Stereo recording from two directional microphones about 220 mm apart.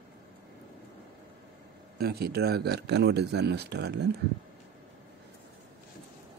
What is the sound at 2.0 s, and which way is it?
Speech, 45° right (ahead or behind).